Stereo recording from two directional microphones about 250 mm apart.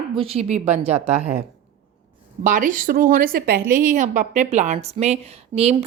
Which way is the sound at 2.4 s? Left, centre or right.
Right.